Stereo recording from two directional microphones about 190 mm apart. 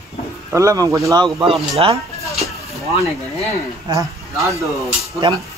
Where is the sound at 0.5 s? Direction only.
15° right (ahead or behind).